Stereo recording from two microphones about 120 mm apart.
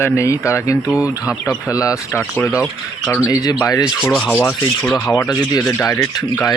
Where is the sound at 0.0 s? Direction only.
25° left (ahead or behind).